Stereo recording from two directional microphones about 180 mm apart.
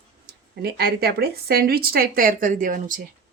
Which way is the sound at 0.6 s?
60° right (ahead or behind).